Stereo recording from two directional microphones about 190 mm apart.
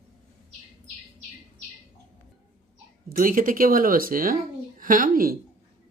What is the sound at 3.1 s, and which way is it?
A woman's voice, 45° right (ahead or behind).